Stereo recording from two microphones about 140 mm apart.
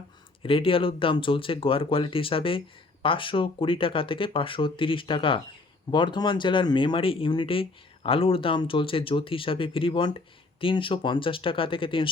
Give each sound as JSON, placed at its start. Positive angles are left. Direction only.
{"t": 0.4, "sound": "speech", "side_deg": 40}